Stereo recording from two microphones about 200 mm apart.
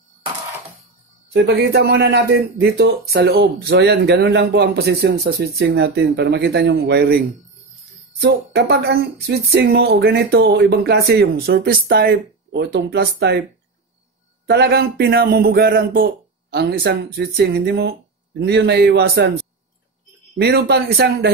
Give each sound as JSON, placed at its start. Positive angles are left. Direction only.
{"t": 1.3, "sound": "speech", "side_deg": -55}
{"t": 8.2, "sound": "speech", "side_deg": -55}
{"t": 14.4, "sound": "a man's voice", "side_deg": -55}
{"t": 20.3, "sound": "speech", "side_deg": -50}